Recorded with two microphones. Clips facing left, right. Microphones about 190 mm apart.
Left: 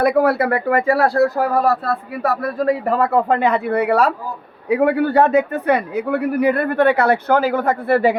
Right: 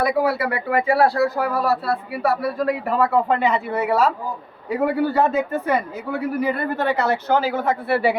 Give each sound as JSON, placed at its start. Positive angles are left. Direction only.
{"t": 0.0, "sound": "speech", "side_deg": 55}
{"t": 3.4, "sound": "a man's voice", "side_deg": 60}